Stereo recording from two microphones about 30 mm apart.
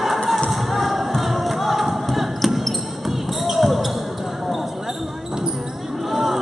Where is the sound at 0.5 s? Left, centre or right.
Centre.